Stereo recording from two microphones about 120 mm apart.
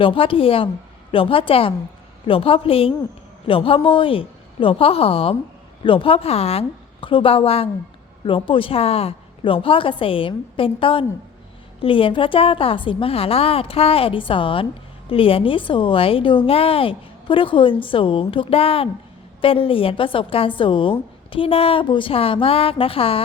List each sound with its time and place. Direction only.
0.0 s a woman's voice: 50° left (ahead or behind)